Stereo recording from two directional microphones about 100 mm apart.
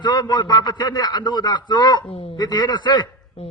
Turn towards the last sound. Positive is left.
turn(degrees=50)  # may be behind; listen again after turning